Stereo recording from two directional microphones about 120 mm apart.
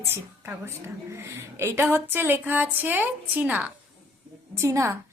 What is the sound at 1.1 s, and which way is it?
A woman's voice, 20° right (ahead or behind).